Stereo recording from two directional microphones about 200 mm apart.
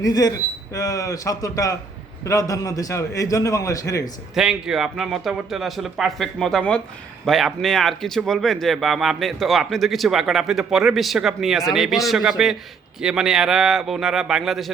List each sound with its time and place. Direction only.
0.0 s a man's voice: 20° left (ahead or behind)
4.4 s speech: 5° right (ahead or behind)